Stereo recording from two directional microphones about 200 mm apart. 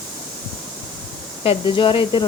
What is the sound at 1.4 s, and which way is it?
Speech, 25° left (ahead or behind).